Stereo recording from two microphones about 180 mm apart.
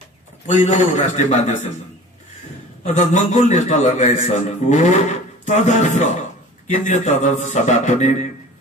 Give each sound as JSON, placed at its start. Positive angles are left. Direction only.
{"t": 0.5, "sound": "a man's voice", "side_deg": 45}
{"t": 2.8, "sound": "a man's voice", "side_deg": 40}